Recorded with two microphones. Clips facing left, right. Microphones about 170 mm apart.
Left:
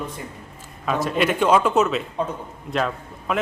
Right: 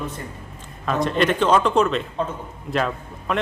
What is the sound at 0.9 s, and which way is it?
A man's voice, 5° left (ahead or behind).